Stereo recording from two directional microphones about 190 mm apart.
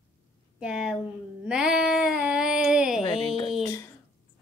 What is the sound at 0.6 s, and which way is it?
Speech, 5° right (ahead or behind).